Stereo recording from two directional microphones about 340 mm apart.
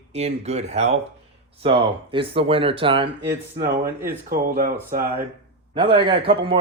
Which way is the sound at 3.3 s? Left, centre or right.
Right.